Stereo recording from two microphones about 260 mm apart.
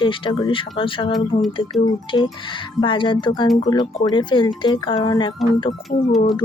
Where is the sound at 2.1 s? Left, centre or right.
Centre.